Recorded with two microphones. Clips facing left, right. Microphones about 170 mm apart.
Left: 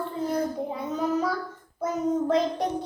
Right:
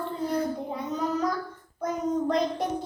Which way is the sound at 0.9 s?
10° left (ahead or behind).